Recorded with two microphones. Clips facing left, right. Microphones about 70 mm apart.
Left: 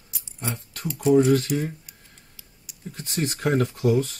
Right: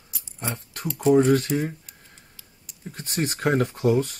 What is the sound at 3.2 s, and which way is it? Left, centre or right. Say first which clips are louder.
Speech: right 1 dB; right.